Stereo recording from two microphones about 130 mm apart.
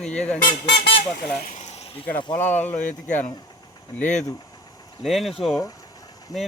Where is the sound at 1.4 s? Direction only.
80° left; by 1.9 s 60° left (ahead or behind).